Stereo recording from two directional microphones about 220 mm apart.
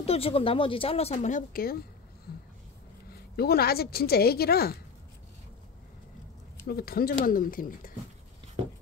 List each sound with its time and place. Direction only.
0.0 s speech: 25° left (ahead or behind); by 1.9 s 45° left (ahead or behind)
2.3 s a sound: 45° left (ahead or behind)
3.1 s a woman's voice: 45° left (ahead or behind)
6.7 s speech: 45° left (ahead or behind)